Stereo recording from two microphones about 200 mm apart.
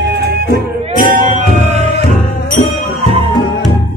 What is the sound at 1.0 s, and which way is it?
Music, 35° right (ahead or behind).